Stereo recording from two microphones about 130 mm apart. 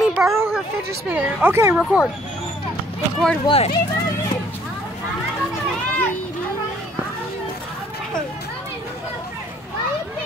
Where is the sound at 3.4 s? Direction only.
50° left (ahead or behind).